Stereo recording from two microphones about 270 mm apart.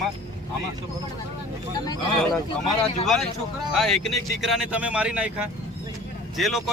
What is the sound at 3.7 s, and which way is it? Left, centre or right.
Speech, centre.